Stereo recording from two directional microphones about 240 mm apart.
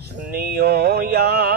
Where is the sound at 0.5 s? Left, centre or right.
Right.